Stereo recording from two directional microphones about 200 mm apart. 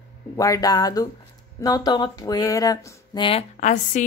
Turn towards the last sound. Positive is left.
turn(degrees=40)  # may be behind; listen again after turning